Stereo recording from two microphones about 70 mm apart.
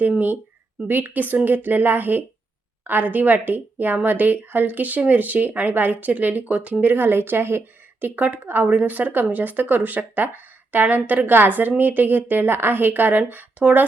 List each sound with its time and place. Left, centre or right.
0.8 s speech: right